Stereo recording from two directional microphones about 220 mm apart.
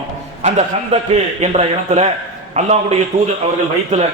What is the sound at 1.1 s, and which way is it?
A man's voice, 30° right (ahead or behind).